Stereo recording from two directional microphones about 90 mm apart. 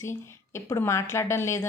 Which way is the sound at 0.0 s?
30° left (ahead or behind).